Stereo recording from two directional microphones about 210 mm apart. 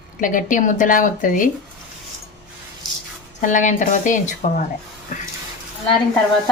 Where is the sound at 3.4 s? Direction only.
35° left (ahead or behind).